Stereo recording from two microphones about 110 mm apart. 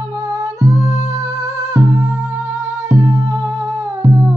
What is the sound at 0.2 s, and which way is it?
Music, 30° right (ahead or behind).